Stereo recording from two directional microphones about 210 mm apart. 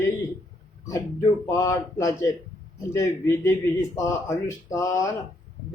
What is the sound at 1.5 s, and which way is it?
Mantra, 15° left (ahead or behind).